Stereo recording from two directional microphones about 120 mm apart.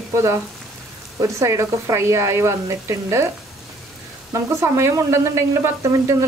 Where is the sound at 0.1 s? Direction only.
25° right (ahead or behind).